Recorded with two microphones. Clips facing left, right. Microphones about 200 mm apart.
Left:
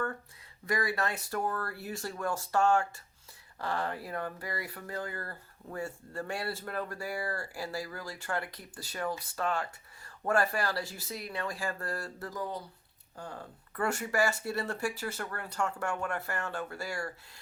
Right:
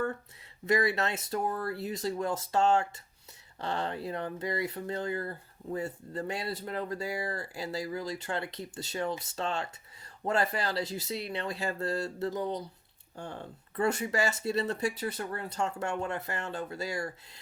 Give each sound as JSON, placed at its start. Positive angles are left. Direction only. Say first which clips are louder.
{"t": 0.6, "sound": "speech", "louder": "right 4 dB", "side_deg": -25}